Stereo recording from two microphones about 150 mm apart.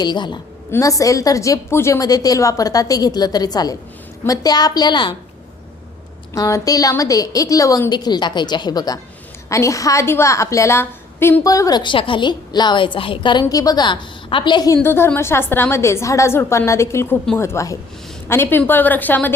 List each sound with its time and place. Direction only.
0.0 s a woman's voice: 30° left (ahead or behind)
6.3 s a woman's voice: 25° left (ahead or behind)
13.4 s a woman's voice: 25° left (ahead or behind)
14.8 s a woman's voice: 15° left (ahead or behind)